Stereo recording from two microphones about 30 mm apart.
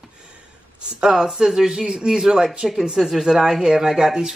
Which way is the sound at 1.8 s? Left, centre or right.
Right.